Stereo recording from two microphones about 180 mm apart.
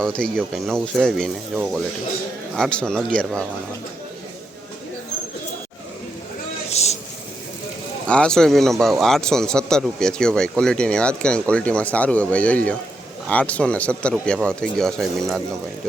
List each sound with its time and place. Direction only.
0.0 s speech: 5° left (ahead or behind)
6.7 s vehicle: 35° left (ahead or behind)
8.0 s speech: 5° left (ahead or behind)